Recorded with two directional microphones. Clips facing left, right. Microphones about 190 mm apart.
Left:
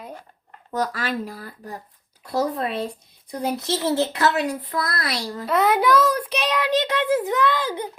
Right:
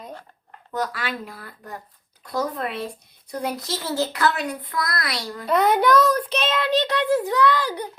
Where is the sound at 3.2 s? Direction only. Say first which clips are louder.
Left 3 dB; 20° left (ahead or behind).